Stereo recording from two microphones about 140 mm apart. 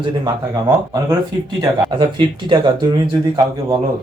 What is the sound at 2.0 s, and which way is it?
Speech, 35° right (ahead or behind).